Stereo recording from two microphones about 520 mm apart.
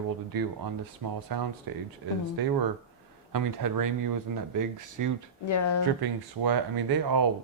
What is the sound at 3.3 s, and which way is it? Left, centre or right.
Speech, right.